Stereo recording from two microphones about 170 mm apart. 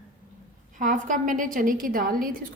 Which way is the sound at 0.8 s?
50° right (ahead or behind).